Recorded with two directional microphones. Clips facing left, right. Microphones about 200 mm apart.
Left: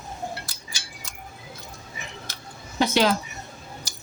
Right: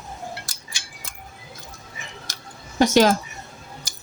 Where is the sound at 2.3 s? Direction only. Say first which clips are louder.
Even; 45° right (ahead or behind).